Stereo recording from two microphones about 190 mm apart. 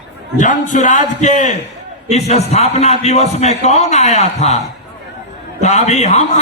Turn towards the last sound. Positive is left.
turn(degrees=35)  # may be behind; listen again after turning